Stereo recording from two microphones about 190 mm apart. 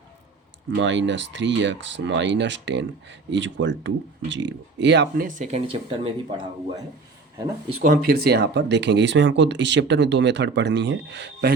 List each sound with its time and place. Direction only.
0.8 s speech: 70° right (ahead or behind); by 6.4 s 30° right (ahead or behind)
7.8 s speech: 50° right (ahead or behind)